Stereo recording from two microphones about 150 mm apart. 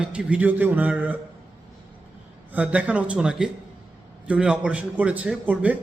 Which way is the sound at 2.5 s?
10° right (ahead or behind).